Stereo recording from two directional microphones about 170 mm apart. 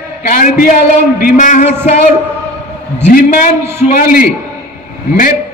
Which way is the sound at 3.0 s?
50° left (ahead or behind).